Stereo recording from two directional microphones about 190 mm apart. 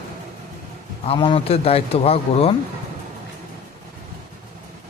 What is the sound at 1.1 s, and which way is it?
Speech, 25° left (ahead or behind).